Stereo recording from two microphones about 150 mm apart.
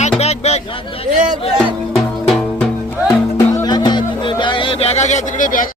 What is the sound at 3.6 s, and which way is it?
Music, 30° left (ahead or behind).